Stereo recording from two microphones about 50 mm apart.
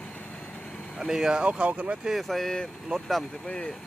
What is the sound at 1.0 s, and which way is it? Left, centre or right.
Speech, centre.